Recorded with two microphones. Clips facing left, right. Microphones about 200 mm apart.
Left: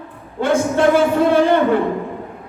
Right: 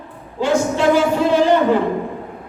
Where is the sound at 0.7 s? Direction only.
55° left (ahead or behind).